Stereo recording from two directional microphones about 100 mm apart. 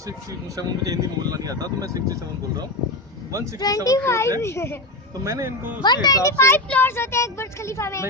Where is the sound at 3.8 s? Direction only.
30° left (ahead or behind).